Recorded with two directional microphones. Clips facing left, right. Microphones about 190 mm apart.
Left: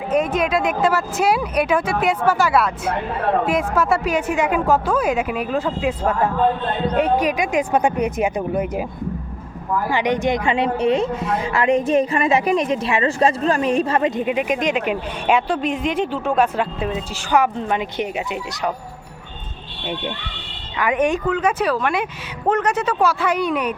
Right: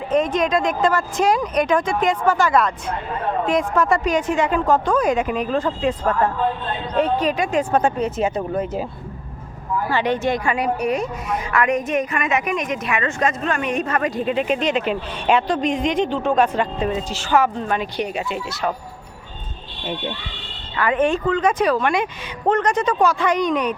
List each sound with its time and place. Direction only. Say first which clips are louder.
0.1 s a woman's voice: even; 5° left (ahead or behind)
9.9 s speech: left 1 dB; 15° left (ahead or behind)
20.7 s a woman's voice: even; 15° left (ahead or behind)